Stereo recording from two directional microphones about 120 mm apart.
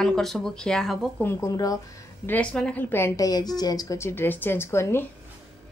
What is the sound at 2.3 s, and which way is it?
A woman's voice, 10° left (ahead or behind).